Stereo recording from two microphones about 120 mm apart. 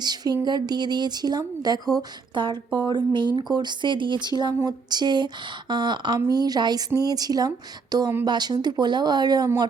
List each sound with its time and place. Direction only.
0.0 s speech: 35° right (ahead or behind)